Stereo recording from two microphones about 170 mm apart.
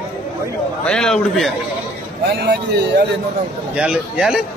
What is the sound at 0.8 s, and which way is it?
Speech, 5° left (ahead or behind).